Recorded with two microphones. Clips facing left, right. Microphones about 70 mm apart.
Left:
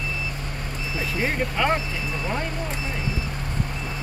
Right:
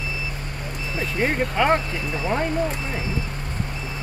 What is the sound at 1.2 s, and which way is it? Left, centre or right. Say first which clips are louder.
Speech: right 3 dB; centre.